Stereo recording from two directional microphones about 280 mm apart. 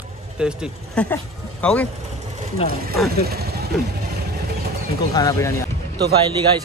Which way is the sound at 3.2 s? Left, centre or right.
Right.